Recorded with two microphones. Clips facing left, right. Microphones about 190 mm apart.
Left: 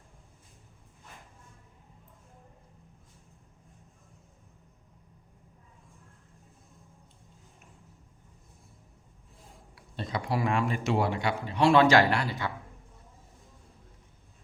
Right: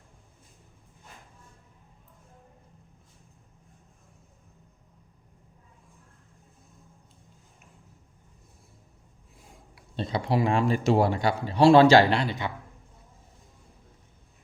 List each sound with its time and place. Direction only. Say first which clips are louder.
9.7 s speech: right 4 dB; 25° right (ahead or behind)